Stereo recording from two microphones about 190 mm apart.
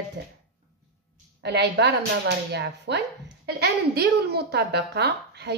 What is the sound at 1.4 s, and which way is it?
Speech, 60° right (ahead or behind).